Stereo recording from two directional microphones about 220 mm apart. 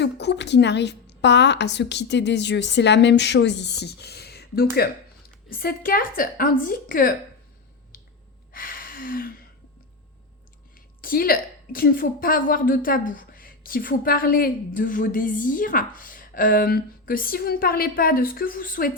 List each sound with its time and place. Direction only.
0.0 s a woman's voice: 50° left (ahead or behind)
8.5 s a sound: 40° left (ahead or behind)
11.0 s a woman's voice: 40° left (ahead or behind)